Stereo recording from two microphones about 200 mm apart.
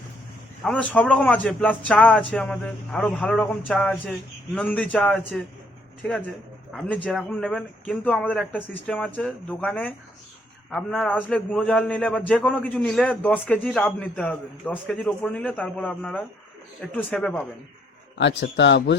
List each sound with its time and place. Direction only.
0.6 s a man's voice: 5° left (ahead or behind)
3.7 s a sound: 5° left (ahead or behind)
4.5 s a man's voice: 5° left (ahead or behind)
18.2 s a man's voice: 60° left (ahead or behind)